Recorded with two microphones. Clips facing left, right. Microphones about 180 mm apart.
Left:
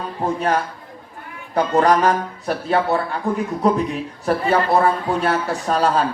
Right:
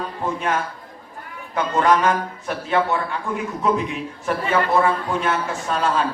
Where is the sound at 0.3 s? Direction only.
35° left (ahead or behind).